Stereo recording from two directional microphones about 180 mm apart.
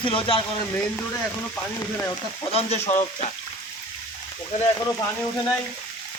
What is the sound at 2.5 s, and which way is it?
Speech, 35° left (ahead or behind).